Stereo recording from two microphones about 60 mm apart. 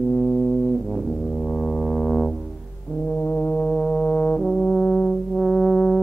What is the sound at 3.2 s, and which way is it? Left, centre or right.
Brass instrument, left.